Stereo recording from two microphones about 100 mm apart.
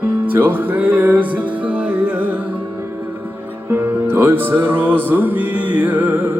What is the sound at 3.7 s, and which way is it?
Music, 20° right (ahead or behind).